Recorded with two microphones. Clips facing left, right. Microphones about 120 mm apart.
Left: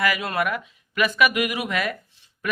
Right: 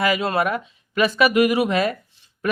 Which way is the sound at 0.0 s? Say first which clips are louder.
Right 4 dB; 25° right (ahead or behind).